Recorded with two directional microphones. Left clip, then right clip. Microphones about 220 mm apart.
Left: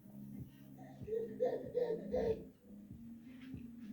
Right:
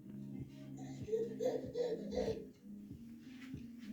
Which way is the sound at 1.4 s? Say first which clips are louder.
Left 1 dB; 20° left (ahead or behind).